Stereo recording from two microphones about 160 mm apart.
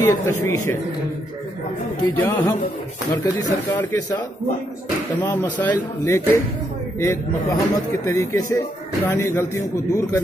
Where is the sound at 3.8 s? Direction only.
20° left (ahead or behind).